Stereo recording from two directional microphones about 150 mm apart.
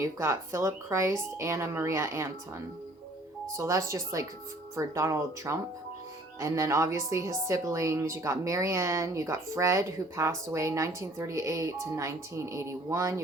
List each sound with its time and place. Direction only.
0.0 s speech: 20° right (ahead or behind)
3.6 s speech: 20° right (ahead or behind)